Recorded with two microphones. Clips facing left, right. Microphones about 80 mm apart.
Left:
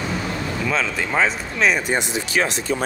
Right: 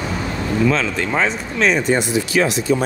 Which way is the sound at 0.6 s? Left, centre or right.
Centre.